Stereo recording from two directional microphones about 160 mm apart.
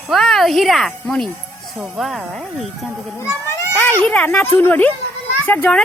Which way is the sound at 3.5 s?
10° left (ahead or behind).